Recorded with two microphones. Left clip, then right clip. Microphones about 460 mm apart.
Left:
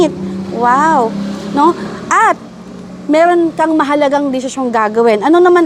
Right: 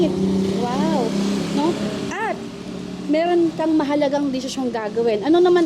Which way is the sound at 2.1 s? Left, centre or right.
Left.